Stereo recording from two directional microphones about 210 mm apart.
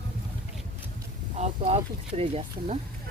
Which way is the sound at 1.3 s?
30° right (ahead or behind).